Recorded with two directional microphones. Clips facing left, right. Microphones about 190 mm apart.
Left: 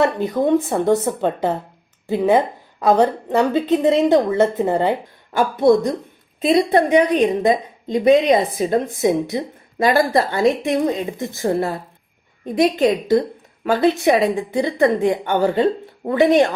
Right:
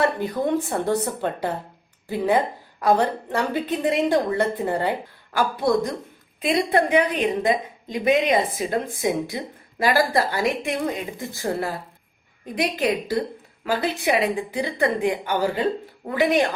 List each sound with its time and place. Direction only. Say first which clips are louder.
0.0 s a woman's voice: left 5 dB; 20° left (ahead or behind)